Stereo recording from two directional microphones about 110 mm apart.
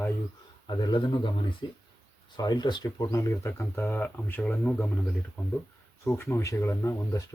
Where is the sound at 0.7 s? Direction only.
45° left (ahead or behind); by 4.9 s 15° left (ahead or behind).